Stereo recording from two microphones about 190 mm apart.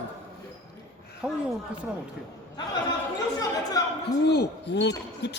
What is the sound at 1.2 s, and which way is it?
Speech, 5° right (ahead or behind).